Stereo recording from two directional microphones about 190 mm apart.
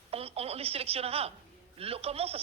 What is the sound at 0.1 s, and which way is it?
A woman's voice, 30° right (ahead or behind).